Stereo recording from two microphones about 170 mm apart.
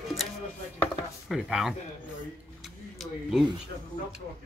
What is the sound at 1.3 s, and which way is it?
Speech, centre (ahead or behind).